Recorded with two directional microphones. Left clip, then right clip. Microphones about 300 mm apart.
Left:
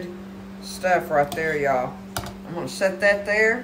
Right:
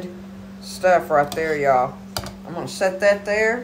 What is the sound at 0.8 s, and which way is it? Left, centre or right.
Speech, centre.